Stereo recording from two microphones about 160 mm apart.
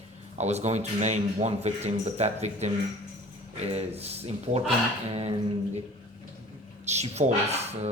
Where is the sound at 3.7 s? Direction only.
40° right (ahead or behind).